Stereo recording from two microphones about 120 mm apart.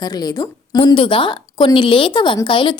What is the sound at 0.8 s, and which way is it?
A woman's voice, 45° left (ahead or behind).